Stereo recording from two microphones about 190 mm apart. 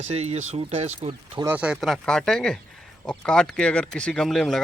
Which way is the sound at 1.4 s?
5° right (ahead or behind).